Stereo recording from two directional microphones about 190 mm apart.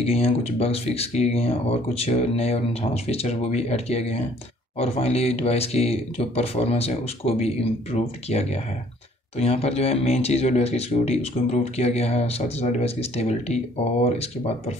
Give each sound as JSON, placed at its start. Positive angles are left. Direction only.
{"t": 0.0, "sound": "speech", "side_deg": 30}